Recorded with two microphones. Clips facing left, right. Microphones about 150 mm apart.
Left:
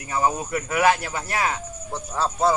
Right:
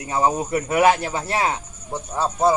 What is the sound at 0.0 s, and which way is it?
Speech, 25° right (ahead or behind).